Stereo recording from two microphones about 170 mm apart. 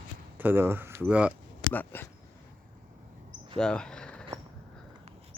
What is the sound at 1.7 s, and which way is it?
Speech, 10° left (ahead or behind).